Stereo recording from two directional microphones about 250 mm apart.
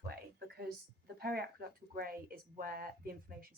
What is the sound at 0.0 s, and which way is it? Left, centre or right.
Speech, right.